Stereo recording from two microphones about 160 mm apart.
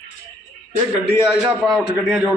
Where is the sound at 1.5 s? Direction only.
Centre (ahead or behind).